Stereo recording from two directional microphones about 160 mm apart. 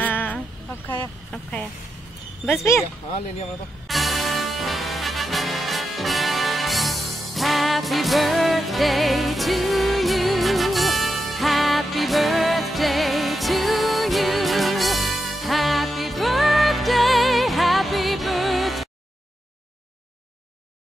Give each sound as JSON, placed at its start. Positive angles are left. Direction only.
{"t": 0.0, "sound": "a sound", "side_deg": 10}
{"t": 1.3, "sound": "speech", "side_deg": 5}
{"t": 3.8, "sound": "music", "side_deg": 0}